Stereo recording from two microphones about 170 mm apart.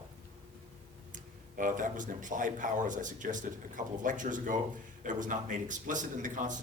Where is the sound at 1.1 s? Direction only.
50° right (ahead or behind).